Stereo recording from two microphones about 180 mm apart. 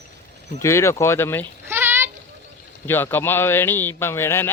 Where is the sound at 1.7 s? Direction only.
10° right (ahead or behind).